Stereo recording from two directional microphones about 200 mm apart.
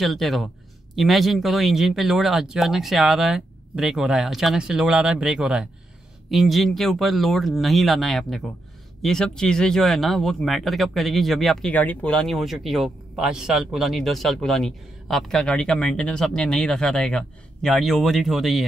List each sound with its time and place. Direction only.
0.0 s speech: centre (ahead or behind)